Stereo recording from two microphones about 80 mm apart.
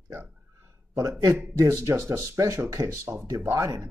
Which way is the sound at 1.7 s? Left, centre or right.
Right.